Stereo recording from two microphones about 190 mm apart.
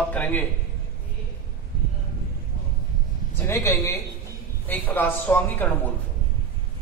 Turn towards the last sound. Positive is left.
turn(degrees=10)  # may be behind; listen again after turning